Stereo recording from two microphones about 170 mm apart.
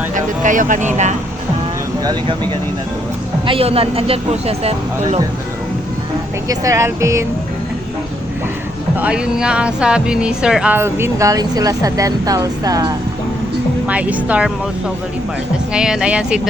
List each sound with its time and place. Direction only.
0.1 s speech: 50° right (ahead or behind)
3.4 s speech: 35° right (ahead or behind)
6.5 s speech: 20° right (ahead or behind)
9.0 s speech: 5° right (ahead or behind); by 13.0 s 20° right (ahead or behind)
13.8 s speech: 10° right (ahead or behind)
15.7 s speech: 5° right (ahead or behind)